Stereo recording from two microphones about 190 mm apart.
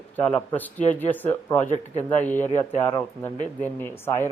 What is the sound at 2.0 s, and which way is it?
A man's voice, 10° left (ahead or behind).